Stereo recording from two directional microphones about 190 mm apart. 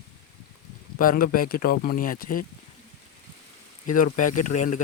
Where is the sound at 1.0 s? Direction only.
50° left (ahead or behind).